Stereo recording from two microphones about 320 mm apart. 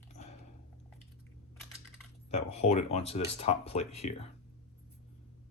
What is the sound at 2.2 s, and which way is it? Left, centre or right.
Speech, centre.